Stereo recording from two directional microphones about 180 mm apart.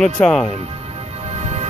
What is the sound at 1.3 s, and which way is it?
Music, 35° right (ahead or behind).